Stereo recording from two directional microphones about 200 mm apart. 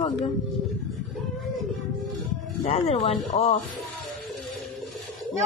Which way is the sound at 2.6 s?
30° left (ahead or behind).